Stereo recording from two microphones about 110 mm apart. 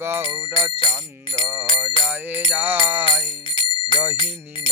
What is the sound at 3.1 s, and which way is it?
Speech, 50° left (ahead or behind).